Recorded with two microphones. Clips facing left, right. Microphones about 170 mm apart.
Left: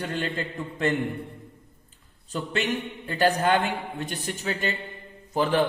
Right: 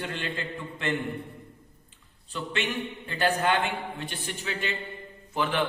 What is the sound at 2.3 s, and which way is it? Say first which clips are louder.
A man's voice: left 3 dB; 40° left (ahead or behind).